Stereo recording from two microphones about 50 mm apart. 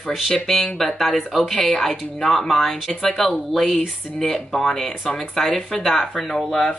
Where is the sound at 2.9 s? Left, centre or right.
Centre.